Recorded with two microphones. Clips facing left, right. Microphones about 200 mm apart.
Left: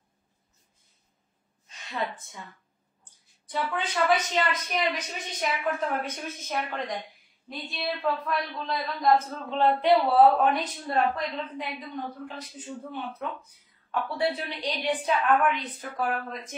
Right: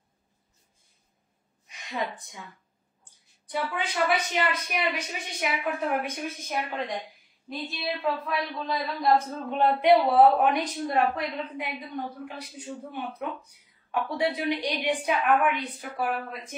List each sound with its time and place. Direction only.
1.7 s a woman's voice: 15° right (ahead or behind)
3.7 s a woman's voice: 10° right (ahead or behind)
9.3 s a woman's voice: 15° right (ahead or behind)